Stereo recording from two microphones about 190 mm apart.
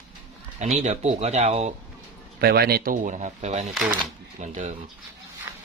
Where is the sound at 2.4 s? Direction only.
55° right (ahead or behind); by 4.7 s 40° right (ahead or behind).